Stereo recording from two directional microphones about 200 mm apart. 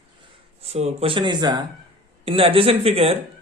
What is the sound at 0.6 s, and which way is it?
Speech, 30° right (ahead or behind).